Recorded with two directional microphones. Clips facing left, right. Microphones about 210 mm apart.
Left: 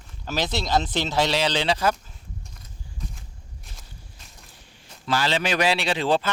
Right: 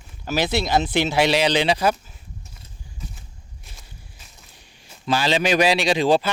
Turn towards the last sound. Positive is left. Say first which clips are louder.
# right 5 dB
turn(degrees=-15)  # may be behind; listen again after turning